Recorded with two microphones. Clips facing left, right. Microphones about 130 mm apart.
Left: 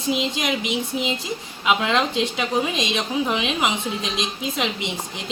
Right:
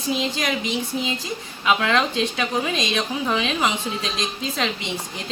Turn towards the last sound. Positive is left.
turn(degrees=20)  # may be behind; listen again after turning